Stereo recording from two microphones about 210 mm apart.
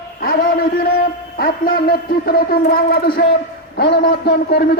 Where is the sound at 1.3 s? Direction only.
45° left (ahead or behind).